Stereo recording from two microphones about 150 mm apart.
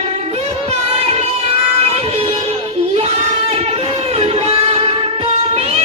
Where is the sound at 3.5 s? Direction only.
45° right (ahead or behind).